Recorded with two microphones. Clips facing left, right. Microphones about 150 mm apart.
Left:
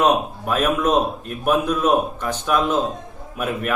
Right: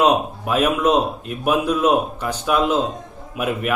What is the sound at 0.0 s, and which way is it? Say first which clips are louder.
A man's voice: right 1 dB; 10° right (ahead or behind).